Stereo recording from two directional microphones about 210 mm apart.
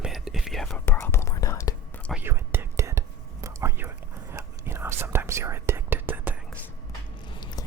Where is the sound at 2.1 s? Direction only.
10° right (ahead or behind).